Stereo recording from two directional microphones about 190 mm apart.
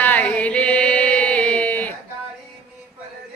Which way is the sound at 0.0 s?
10° left (ahead or behind).